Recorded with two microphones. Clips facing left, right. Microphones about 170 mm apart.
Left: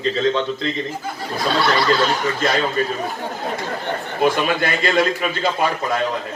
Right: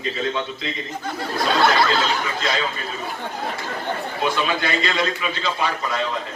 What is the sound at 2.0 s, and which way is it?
Speech, 50° left (ahead or behind).